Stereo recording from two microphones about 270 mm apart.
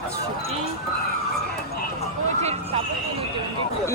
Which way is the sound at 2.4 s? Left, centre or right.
Right.